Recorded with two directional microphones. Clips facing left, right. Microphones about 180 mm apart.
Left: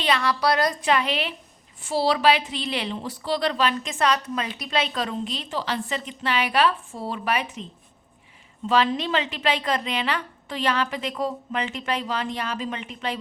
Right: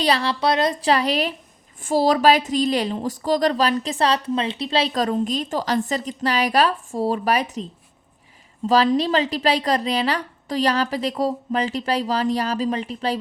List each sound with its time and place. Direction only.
0.0 s a woman's voice: 35° right (ahead or behind)